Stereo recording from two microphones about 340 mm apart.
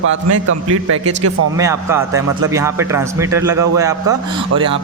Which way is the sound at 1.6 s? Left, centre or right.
Centre.